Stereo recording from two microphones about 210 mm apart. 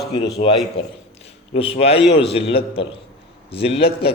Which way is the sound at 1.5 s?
30° left (ahead or behind).